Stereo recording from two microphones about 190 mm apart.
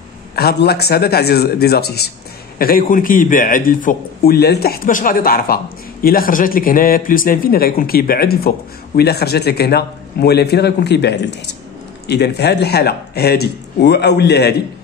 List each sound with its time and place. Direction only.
0.4 s a man's voice: 55° left (ahead or behind)